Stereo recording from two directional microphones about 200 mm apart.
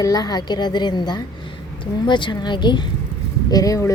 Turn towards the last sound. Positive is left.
turn(degrees=15)  # may be behind; listen again after turning